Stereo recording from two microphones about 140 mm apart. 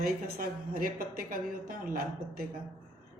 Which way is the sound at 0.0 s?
90° right.